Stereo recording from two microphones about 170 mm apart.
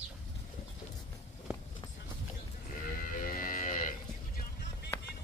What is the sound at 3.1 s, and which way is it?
Cattle, 55° left (ahead or behind).